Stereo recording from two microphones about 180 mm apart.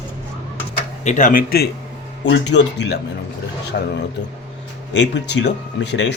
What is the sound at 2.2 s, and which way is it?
Speech, 75° left (ahead or behind).